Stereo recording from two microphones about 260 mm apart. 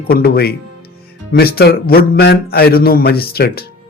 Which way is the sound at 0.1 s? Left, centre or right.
Left.